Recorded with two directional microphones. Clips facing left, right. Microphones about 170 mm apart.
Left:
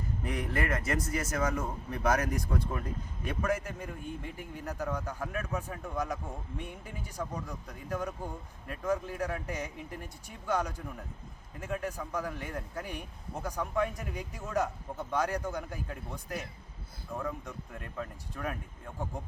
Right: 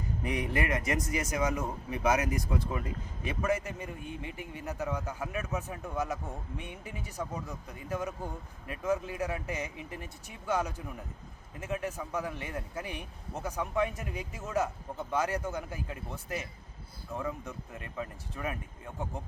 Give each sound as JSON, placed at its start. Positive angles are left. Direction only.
{"t": 0.2, "sound": "a man's voice", "side_deg": -10}